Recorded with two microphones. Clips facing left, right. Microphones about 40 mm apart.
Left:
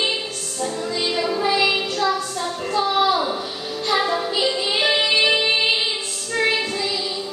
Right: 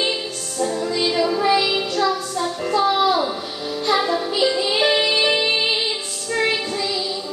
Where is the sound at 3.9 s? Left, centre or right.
Centre.